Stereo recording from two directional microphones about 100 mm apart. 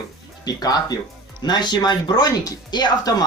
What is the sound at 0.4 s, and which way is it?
Speech, 40° left (ahead or behind).